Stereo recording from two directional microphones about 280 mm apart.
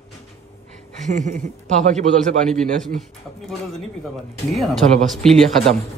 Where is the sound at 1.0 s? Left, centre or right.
Right.